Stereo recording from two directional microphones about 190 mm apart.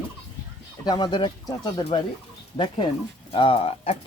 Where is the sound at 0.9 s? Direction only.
25° left (ahead or behind).